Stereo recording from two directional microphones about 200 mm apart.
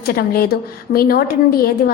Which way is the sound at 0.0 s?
50° left (ahead or behind).